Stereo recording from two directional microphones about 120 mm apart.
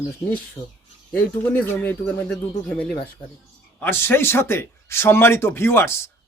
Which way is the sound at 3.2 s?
45° left (ahead or behind).